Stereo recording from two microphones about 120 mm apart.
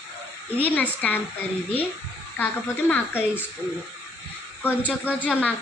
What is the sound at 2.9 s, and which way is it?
Speech, 15° left (ahead or behind).